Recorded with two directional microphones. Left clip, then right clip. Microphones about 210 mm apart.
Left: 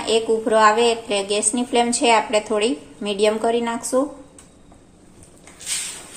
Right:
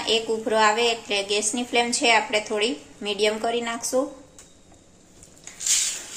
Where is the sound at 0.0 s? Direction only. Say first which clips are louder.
Left 4 dB; 5° left (ahead or behind).